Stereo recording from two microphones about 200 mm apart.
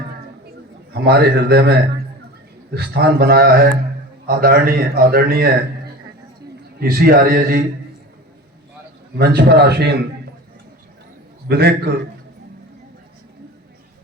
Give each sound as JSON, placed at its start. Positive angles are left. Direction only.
{"t": 0.9, "sound": "a man's voice", "side_deg": -55}
{"t": 6.7, "sound": "a man's voice", "side_deg": -50}
{"t": 9.1, "sound": "a man's voice", "side_deg": -55}
{"t": 11.4, "sound": "a man's voice", "side_deg": -55}